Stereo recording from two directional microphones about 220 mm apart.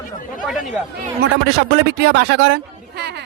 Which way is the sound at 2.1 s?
50° right (ahead or behind).